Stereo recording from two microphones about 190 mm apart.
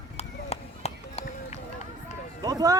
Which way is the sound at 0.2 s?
35° left (ahead or behind).